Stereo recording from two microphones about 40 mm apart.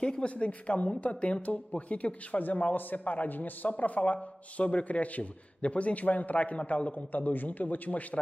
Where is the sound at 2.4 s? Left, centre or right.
Left.